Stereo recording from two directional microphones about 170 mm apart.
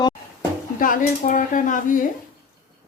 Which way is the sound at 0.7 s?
50° left (ahead or behind).